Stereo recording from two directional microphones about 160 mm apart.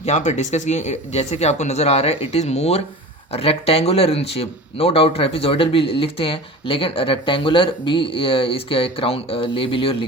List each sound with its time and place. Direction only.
0.0 s speech: 45° left (ahead or behind)